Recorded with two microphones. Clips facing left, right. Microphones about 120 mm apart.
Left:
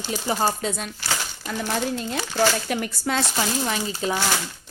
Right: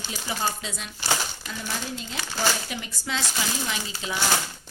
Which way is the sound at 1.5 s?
60° left (ahead or behind).